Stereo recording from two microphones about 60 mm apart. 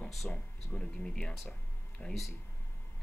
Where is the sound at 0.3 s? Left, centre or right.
Centre.